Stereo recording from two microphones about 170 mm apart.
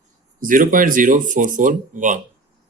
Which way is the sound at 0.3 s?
55° right (ahead or behind).